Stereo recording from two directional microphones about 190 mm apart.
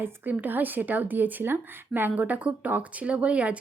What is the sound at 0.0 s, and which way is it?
Speech, 10° right (ahead or behind).